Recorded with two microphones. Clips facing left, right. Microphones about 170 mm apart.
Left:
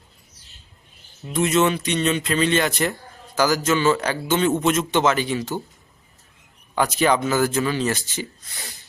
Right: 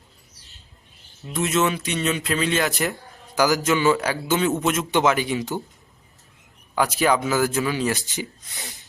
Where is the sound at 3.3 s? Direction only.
15° right (ahead or behind).